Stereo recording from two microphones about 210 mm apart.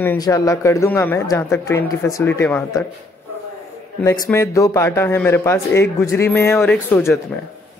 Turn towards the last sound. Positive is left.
turn(degrees=10)  # may be behind; listen again after turning